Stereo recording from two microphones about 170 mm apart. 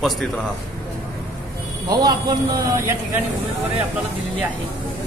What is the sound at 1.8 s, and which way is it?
Speech, 25° right (ahead or behind).